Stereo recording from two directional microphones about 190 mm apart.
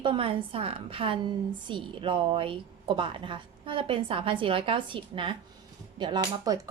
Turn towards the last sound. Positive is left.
turn(degrees=-25)  # may be behind; listen again after turning